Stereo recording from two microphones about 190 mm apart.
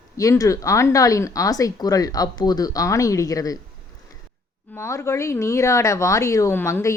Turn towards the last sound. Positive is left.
turn(degrees=10)  # may be behind; listen again after turning